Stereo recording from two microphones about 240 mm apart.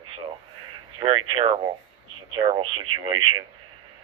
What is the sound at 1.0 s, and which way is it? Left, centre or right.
Speech, right.